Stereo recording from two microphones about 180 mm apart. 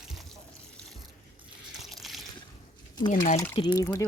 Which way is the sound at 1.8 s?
Centre (ahead or behind).